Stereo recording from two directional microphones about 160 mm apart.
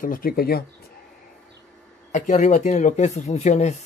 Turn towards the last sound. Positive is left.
turn(degrees=45)  # may be behind; listen again after turning